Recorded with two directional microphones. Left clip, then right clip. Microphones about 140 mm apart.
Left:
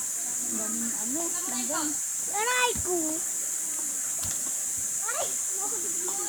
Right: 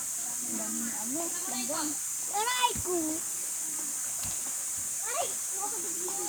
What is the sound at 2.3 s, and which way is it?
Speech, 30° right (ahead or behind).